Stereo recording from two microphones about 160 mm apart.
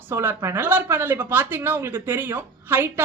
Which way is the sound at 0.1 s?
15° right (ahead or behind).